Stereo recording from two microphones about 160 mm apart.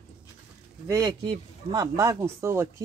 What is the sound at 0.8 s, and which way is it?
Speech, 20° right (ahead or behind).